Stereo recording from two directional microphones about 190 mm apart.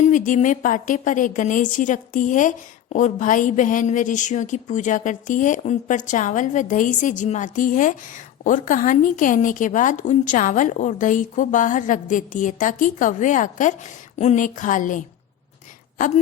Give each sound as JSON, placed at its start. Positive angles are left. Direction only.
{"t": 0.0, "sound": "a woman's voice", "side_deg": 40}